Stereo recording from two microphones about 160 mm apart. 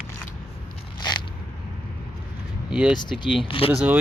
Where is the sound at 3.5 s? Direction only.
35° left (ahead or behind).